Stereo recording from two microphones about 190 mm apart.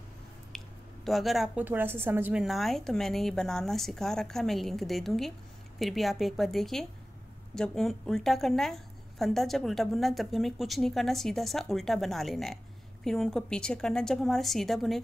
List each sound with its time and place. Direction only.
1.0 s a woman's voice: centre (ahead or behind)